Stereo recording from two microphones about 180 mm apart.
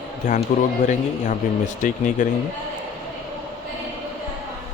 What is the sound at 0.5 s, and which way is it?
Speech, 45° left (ahead or behind).